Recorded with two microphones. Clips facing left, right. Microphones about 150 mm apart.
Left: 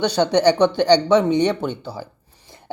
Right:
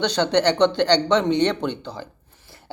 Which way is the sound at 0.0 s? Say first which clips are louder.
Left 3 dB; 10° left (ahead or behind).